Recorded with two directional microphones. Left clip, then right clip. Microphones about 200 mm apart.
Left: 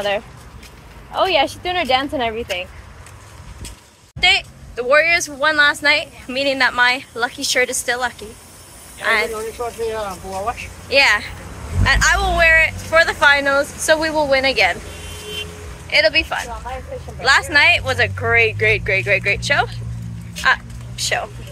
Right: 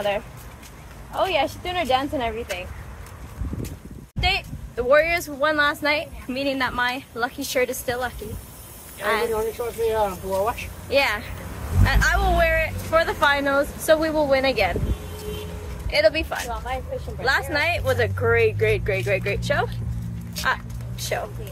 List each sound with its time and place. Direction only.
1.1 s speech: 25° left (ahead or behind)
4.2 s speech: centre (ahead or behind)
4.7 s a man's voice: 15° right (ahead or behind)
9.9 s speech: 50° right (ahead or behind)
10.9 s speech: 10° right (ahead or behind)
15.9 s a man's voice: centre (ahead or behind)
20.4 s vehicle: 10° right (ahead or behind)